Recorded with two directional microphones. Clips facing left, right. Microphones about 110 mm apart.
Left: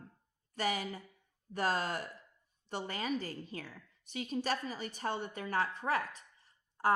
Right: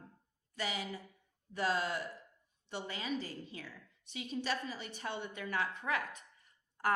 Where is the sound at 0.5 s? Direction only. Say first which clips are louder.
Left 4 dB; 45° left (ahead or behind).